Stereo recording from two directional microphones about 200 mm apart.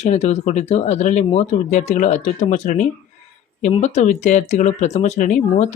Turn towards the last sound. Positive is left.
turn(degrees=35)  # may be behind; listen again after turning